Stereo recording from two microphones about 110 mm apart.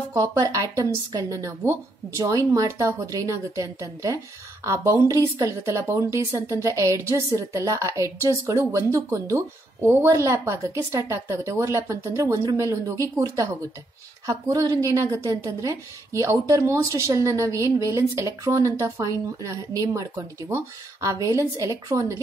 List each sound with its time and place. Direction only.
0.1 s a woman's voice: 30° right (ahead or behind)